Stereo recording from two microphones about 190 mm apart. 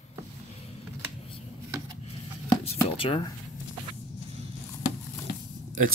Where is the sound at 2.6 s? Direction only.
25° left (ahead or behind).